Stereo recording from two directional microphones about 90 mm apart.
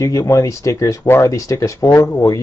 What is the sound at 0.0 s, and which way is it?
Speech, 35° left (ahead or behind).